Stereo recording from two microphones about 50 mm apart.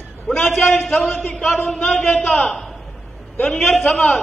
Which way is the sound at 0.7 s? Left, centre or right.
Centre.